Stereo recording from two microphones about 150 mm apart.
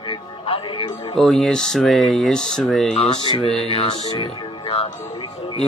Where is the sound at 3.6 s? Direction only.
35° left (ahead or behind).